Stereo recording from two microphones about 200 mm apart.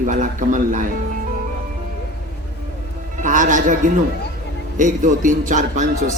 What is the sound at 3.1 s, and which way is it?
Speech, 40° right (ahead or behind).